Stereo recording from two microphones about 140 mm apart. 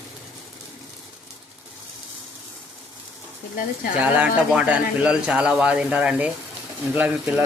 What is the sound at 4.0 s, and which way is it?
Speech, 10° right (ahead or behind).